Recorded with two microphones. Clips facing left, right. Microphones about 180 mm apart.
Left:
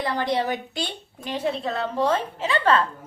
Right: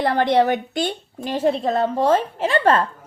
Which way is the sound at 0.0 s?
65° right (ahead or behind).